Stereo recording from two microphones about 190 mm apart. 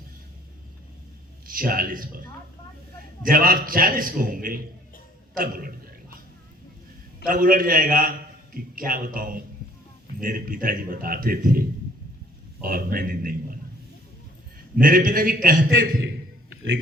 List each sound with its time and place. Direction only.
1.5 s a man's voice: 50° right (ahead or behind)
3.2 s a man's voice: 50° right (ahead or behind)
7.3 s a man's voice: 45° right (ahead or behind)
12.6 s a man's voice: 50° right (ahead or behind)
14.8 s a man's voice: 45° right (ahead or behind)